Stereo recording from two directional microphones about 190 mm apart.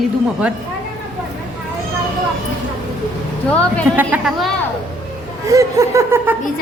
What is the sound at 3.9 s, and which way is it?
Speech, 5° right (ahead or behind).